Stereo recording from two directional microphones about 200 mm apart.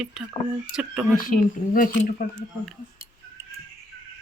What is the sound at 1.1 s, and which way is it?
Speech, 45° left (ahead or behind).